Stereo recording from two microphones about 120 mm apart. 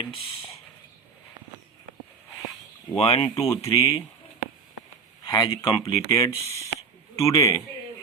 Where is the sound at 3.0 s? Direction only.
55° left (ahead or behind).